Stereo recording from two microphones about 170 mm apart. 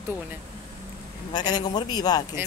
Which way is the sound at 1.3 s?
25° left (ahead or behind).